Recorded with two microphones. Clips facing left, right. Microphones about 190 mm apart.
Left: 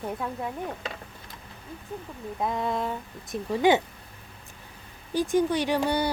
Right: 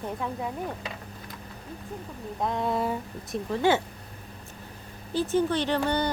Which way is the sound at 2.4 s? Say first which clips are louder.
Right 1 dB; centre (ahead or behind).